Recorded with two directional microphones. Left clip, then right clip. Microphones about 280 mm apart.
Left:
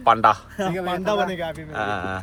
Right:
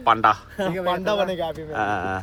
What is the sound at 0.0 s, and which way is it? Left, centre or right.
A man's voice, centre.